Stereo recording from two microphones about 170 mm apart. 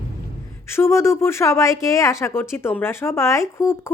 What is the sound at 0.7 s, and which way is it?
Speech, 15° left (ahead or behind).